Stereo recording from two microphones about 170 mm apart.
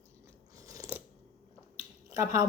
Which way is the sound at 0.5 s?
20° right (ahead or behind).